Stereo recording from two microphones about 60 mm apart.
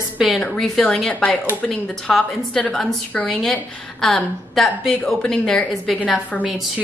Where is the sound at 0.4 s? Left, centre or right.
Centre.